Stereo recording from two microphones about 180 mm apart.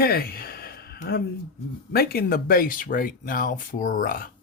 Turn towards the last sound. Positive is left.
turn(degrees=50)  # may be behind; listen again after turning